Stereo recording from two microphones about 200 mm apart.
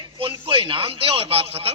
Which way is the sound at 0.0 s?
25° right (ahead or behind).